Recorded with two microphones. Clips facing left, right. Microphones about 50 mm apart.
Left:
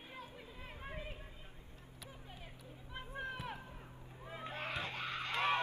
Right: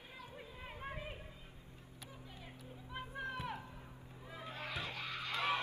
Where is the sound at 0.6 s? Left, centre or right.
Centre.